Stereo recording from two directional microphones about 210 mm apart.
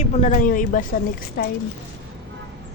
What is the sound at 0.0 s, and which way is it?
A woman's voice, 35° left (ahead or behind).